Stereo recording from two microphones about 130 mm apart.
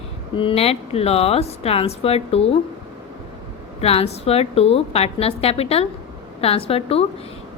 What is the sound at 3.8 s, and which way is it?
A woman's voice, 50° left (ahead or behind).